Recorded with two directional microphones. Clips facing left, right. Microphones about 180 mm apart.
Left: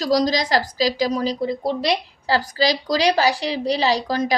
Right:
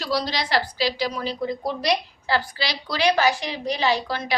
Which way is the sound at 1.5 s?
25° left (ahead or behind).